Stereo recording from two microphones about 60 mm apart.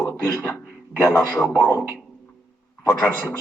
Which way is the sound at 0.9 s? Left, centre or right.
Left.